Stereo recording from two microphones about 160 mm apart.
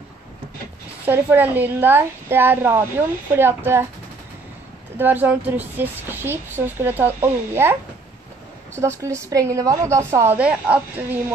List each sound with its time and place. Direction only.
1.0 s a child's voice: 10° right (ahead or behind)
4.9 s a child's voice: 10° right (ahead or behind)
8.7 s a child's voice: 15° right (ahead or behind)